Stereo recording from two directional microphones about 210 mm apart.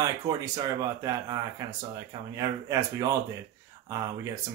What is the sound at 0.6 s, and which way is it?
Speech, 15° right (ahead or behind).